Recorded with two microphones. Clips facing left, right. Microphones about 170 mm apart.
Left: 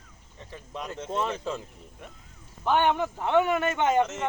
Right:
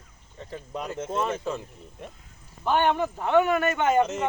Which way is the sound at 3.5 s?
25° left (ahead or behind).